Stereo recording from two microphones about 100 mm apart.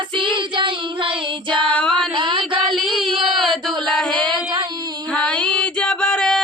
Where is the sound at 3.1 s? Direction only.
Centre (ahead or behind).